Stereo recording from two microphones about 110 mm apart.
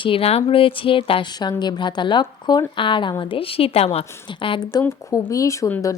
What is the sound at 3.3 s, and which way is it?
Speech, 60° left (ahead or behind).